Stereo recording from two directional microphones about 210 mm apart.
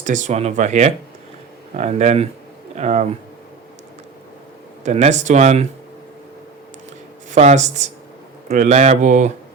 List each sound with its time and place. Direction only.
0.0 s speech: 35° right (ahead or behind)
4.8 s speech: 30° right (ahead or behind)
7.3 s speech: 35° right (ahead or behind)